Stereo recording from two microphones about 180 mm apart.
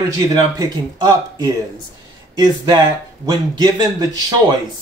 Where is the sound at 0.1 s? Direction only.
20° right (ahead or behind).